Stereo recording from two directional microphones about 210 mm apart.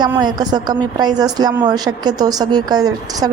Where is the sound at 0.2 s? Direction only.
20° right (ahead or behind).